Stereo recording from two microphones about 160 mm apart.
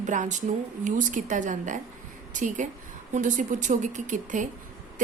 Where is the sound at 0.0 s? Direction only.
50° right (ahead or behind).